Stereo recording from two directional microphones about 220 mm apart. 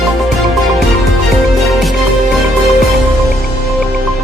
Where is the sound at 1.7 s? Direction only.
Centre (ahead or behind).